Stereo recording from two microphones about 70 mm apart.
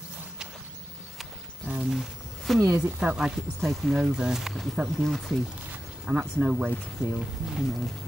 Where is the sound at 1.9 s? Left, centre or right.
Centre.